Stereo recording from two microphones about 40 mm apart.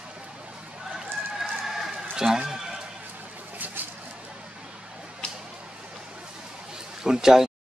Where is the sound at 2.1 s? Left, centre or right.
Centre.